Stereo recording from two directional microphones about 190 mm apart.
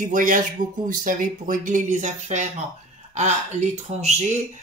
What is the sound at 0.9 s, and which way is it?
Speech, 45° right (ahead or behind).